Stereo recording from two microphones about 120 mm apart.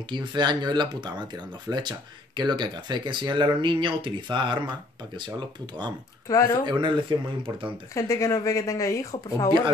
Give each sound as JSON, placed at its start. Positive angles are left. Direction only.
{"t": 0.1, "sound": "speech", "side_deg": -40}
{"t": 6.2, "sound": "speech", "side_deg": 25}
{"t": 6.6, "sound": "speech", "side_deg": -40}
{"t": 7.9, "sound": "speech", "side_deg": 25}